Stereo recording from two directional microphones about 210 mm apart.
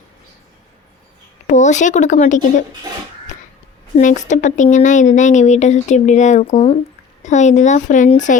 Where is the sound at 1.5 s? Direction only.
35° left (ahead or behind).